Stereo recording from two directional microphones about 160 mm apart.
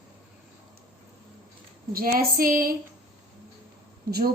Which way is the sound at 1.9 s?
65° right (ahead or behind).